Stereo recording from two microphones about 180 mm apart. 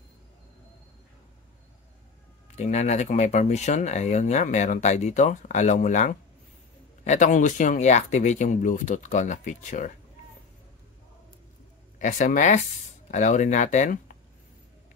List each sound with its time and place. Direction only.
2.5 s speech: 40° left (ahead or behind)
12.0 s speech: 45° left (ahead or behind)